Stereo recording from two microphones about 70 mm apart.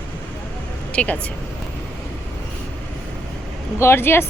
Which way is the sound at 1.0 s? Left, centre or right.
Centre.